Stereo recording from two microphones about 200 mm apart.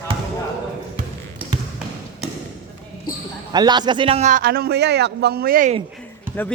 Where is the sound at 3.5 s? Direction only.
20° right (ahead or behind); by 5.8 s 40° right (ahead or behind).